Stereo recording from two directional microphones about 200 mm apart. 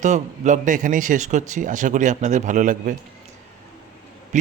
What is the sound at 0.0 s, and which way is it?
A man's voice, 35° right (ahead or behind).